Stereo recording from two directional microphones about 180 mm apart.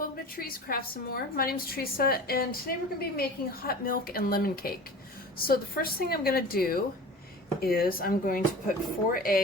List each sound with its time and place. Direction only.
0.0 s a woman's voice: 55° left (ahead or behind)